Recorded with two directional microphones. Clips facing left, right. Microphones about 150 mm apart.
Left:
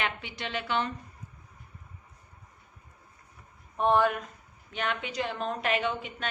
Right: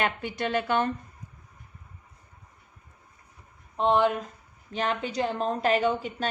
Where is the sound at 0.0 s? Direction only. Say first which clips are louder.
Right 6 dB; 45° right (ahead or behind).